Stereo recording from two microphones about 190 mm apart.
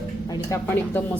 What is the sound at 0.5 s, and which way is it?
Speech, 10° left (ahead or behind).